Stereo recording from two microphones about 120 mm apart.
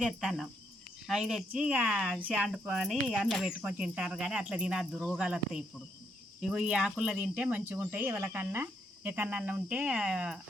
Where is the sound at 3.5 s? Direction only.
10° right (ahead or behind).